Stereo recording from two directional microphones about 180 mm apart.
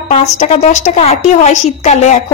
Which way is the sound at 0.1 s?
40° left (ahead or behind).